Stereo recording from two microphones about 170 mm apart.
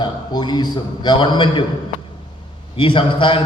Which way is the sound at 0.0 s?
25° left (ahead or behind).